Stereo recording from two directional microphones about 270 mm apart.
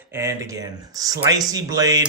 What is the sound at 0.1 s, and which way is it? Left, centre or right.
Speech, centre.